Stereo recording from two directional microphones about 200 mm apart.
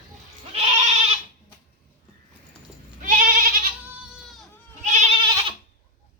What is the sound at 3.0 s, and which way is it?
Goat, 40° right (ahead or behind).